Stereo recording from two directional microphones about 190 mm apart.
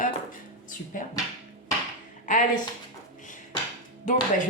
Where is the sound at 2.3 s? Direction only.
45° left (ahead or behind).